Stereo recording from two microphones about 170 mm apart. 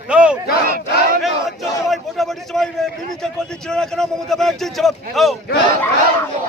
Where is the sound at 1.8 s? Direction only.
Centre (ahead or behind).